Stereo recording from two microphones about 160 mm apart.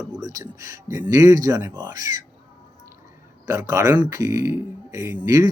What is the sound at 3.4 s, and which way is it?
Speech, 20° right (ahead or behind).